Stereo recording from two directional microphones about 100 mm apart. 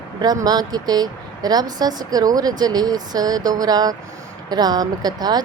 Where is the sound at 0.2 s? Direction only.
40° right (ahead or behind).